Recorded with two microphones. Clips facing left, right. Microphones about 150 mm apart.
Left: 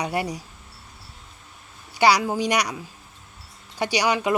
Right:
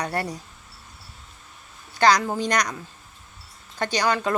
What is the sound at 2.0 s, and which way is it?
Speech, 10° left (ahead or behind).